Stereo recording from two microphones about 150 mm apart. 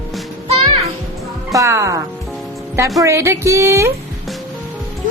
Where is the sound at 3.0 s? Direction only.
20° right (ahead or behind).